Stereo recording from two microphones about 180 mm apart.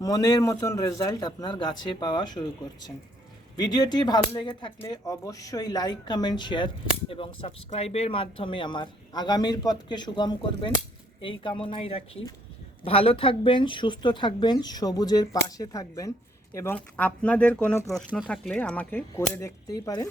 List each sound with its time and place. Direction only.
0.0 s speech: 20° left (ahead or behind)
3.6 s speech: 25° left (ahead or behind)